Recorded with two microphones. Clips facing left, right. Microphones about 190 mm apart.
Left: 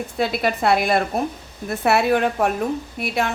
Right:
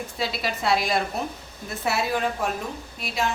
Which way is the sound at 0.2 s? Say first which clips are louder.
Left 8 dB; 55° left (ahead or behind).